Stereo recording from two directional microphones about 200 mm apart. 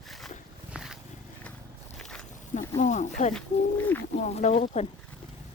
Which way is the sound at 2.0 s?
5° left (ahead or behind).